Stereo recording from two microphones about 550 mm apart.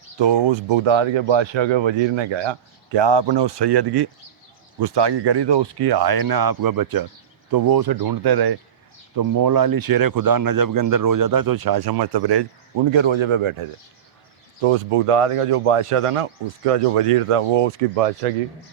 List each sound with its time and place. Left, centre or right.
0.2 s speech: right